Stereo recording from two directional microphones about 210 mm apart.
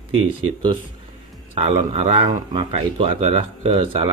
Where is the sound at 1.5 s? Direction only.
30° right (ahead or behind).